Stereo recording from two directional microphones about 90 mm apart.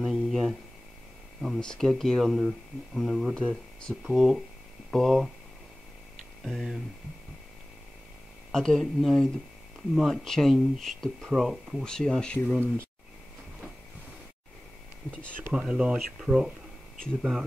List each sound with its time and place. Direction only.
0.0 s a sound: centre (ahead or behind)
1.6 s speech: 5° left (ahead or behind)
3.3 s speech: 10° left (ahead or behind)
6.4 s speech: centre (ahead or behind)
8.5 s speech: 5° left (ahead or behind)
11.8 s speech: 5° left (ahead or behind)
15.5 s speech: 10° right (ahead or behind)